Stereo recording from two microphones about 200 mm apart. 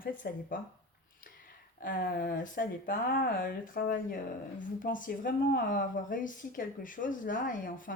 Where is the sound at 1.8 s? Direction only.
45° left (ahead or behind).